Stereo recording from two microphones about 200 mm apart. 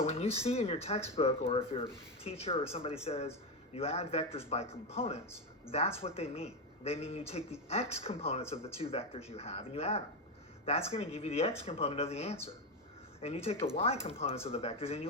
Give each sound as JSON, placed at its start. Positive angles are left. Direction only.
{"t": 0.0, "sound": "speech", "side_deg": 30}